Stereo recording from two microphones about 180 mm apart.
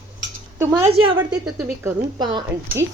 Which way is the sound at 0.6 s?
15° right (ahead or behind).